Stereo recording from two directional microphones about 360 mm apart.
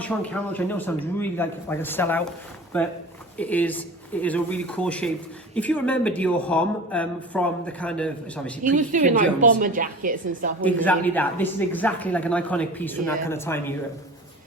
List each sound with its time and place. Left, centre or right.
0.0 s speech: centre
3.3 s speech: centre
8.7 s a woman's voice: right
10.6 s speech: centre